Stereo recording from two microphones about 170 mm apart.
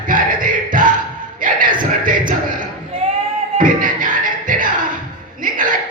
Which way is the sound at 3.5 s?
55° right (ahead or behind).